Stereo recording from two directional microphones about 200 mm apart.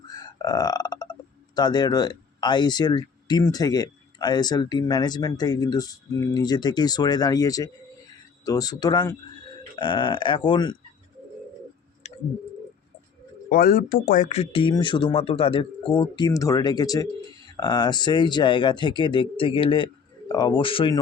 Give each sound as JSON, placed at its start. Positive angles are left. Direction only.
{"t": 0.1, "sound": "burping", "side_deg": 20}
{"t": 1.5, "sound": "speech", "side_deg": 20}
{"t": 12.0, "sound": "clicking", "side_deg": 35}
{"t": 13.5, "sound": "speech", "side_deg": 45}